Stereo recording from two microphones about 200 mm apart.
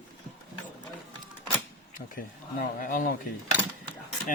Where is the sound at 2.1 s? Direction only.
45° left (ahead or behind).